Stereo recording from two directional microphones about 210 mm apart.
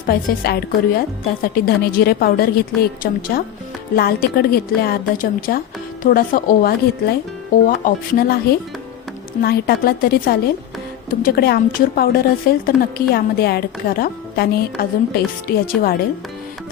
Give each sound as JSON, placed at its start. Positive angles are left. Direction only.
{"t": 0.1, "sound": "a woman's voice", "side_deg": 45}